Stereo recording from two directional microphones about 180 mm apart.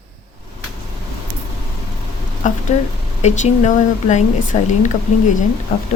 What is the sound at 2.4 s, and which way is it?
Speech, 40° left (ahead or behind).